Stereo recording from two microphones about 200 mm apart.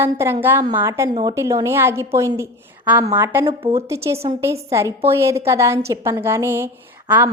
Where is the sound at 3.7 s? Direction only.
15° right (ahead or behind).